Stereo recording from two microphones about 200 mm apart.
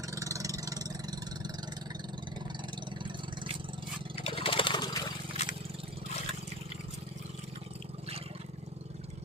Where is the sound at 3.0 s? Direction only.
25° right (ahead or behind).